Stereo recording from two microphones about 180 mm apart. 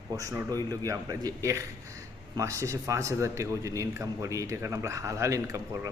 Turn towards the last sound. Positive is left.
turn(degrees=-15)  # may be behind; listen again after turning